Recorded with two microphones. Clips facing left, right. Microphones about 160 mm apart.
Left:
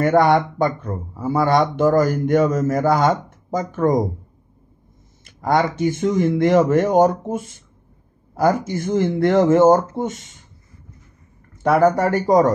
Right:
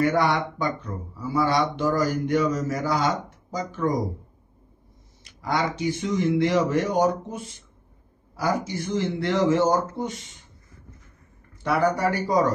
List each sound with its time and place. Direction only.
0.0 s speech: 50° left (ahead or behind)
5.2 s speech: 50° left (ahead or behind)
11.6 s speech: 50° left (ahead or behind)